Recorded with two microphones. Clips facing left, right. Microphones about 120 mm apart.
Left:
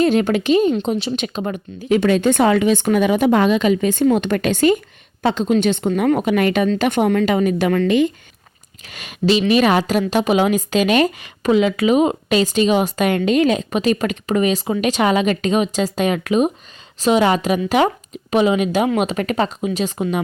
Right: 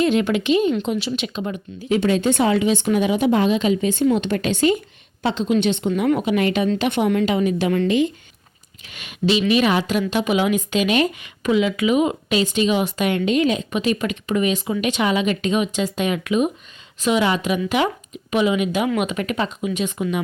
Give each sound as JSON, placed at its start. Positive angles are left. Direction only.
{"t": 0.0, "sound": "a woman's voice", "side_deg": 40}
{"t": 8.9, "sound": "a woman's voice", "side_deg": 40}